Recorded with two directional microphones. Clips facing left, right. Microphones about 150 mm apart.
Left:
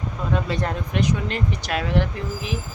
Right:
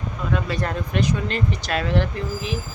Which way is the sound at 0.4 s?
20° left (ahead or behind).